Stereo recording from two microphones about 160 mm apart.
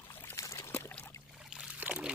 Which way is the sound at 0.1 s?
15° left (ahead or behind).